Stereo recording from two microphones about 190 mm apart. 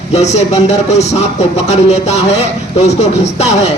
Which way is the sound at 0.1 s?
35° left (ahead or behind).